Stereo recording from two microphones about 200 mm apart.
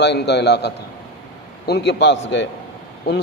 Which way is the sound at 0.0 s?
55° left (ahead or behind).